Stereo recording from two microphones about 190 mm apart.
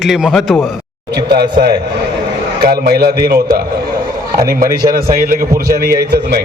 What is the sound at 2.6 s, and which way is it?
Speech, 55° right (ahead or behind).